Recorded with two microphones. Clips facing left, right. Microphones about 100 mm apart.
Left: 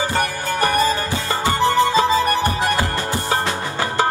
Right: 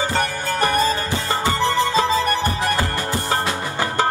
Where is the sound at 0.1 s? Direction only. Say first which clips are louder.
Left 1 dB; 10° left (ahead or behind).